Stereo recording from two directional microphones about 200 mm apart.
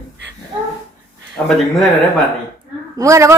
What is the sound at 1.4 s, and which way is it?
Speech, 5° left (ahead or behind).